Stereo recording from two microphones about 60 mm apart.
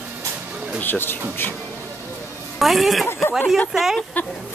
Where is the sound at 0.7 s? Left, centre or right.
Left.